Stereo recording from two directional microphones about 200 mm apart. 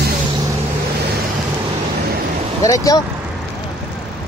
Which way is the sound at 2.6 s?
15° left (ahead or behind).